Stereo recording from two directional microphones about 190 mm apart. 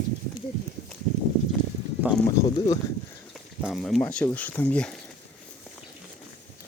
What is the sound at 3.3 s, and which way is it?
Speech, centre (ahead or behind).